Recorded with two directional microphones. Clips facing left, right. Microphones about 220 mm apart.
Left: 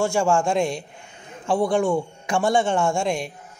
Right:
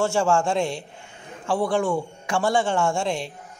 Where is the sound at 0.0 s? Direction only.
15° left (ahead or behind).